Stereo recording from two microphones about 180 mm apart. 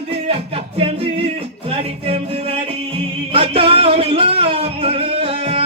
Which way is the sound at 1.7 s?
35° right (ahead or behind).